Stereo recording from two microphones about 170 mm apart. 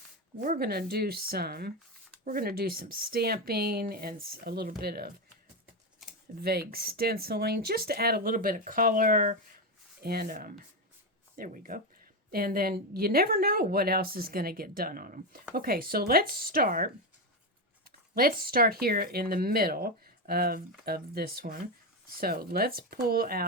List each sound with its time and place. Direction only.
0.4 s speech: 55° right (ahead or behind)
6.4 s speech: 65° right (ahead or behind); by 9.4 s 50° right (ahead or behind)
10.0 s speech: 65° right (ahead or behind)